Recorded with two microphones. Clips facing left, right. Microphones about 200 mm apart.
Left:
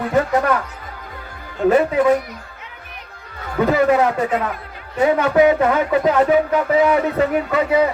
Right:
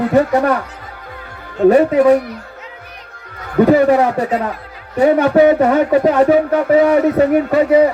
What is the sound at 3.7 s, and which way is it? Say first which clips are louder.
Speech: right 3 dB; 35° right (ahead or behind).